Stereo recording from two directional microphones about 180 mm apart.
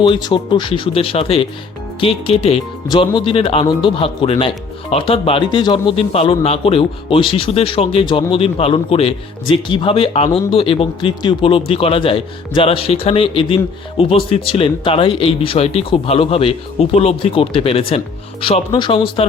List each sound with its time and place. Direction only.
0.0 s speech: 25° left (ahead or behind)